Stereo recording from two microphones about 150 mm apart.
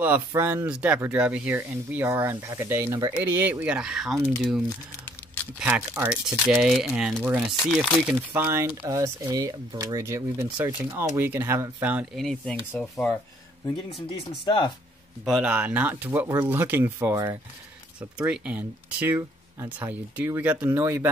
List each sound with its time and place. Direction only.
0.0 s speech: 15° right (ahead or behind); by 8.2 s 5° left (ahead or behind)
8.4 s speech: 20° right (ahead or behind)
12.2 s speech: 5° left (ahead or behind)
13.9 s speech: 35° left (ahead or behind)
15.2 s speech: 10° right (ahead or behind)
18.1 s speech: 5° right (ahead or behind)